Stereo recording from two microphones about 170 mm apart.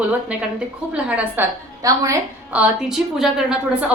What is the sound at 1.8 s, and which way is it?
Speech, 20° right (ahead or behind).